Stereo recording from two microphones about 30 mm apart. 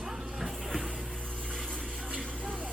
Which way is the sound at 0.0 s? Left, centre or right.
Right.